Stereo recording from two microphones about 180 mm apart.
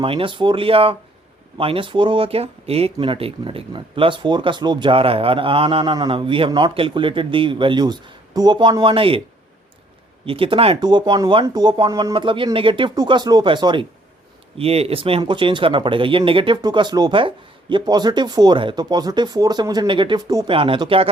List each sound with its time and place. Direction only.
0.0 s speech: 30° right (ahead or behind)
10.2 s speech: 30° right (ahead or behind)
20.5 s speech: 30° right (ahead or behind)